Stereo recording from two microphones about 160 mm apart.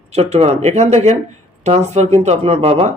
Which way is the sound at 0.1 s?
40° right (ahead or behind).